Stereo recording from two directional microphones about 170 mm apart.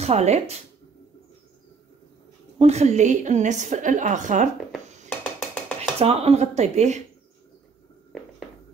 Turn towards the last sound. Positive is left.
turn(degrees=-40)  # may be behind; listen again after turning